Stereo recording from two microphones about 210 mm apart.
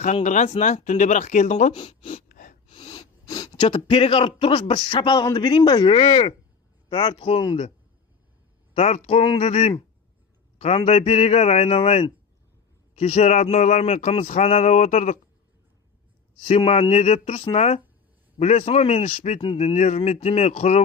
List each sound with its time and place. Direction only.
0.0 s a man's voice: 35° left (ahead or behind)
2.3 s gasp: 40° left (ahead or behind)
2.8 s a sound: 20° left (ahead or behind)
3.6 s speech: 25° left (ahead or behind)
8.7 s a man's voice: 30° left (ahead or behind)
16.4 s a man's voice: 25° left (ahead or behind)